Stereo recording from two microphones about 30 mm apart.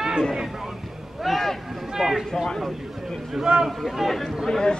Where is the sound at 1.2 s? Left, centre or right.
Centre.